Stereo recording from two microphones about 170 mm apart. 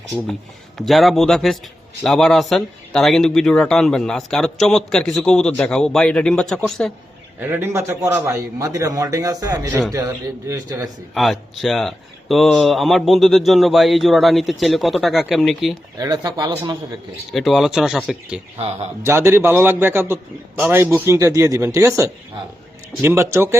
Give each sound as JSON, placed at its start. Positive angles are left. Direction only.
{"t": 0.8, "sound": "speech", "side_deg": 0}
{"t": 7.3, "sound": "a man's voice", "side_deg": -10}
{"t": 11.1, "sound": "speech", "side_deg": 0}
{"t": 16.0, "sound": "a man's voice", "side_deg": -20}
{"t": 17.3, "sound": "speech", "side_deg": 0}
{"t": 18.5, "sound": "speech", "side_deg": -35}
{"t": 19.0, "sound": "a man's voice", "side_deg": -15}